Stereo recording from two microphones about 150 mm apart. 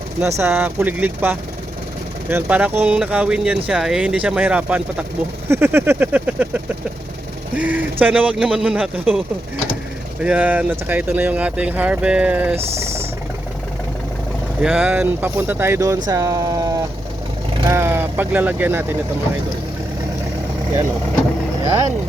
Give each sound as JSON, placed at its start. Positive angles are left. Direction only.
{"t": 0.2, "sound": "speech", "side_deg": -20}
{"t": 12.5, "sound": "speech", "side_deg": -45}
{"t": 14.6, "sound": "speech", "side_deg": -10}